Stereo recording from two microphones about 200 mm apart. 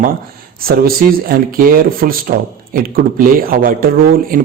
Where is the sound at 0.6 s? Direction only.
45° right (ahead or behind).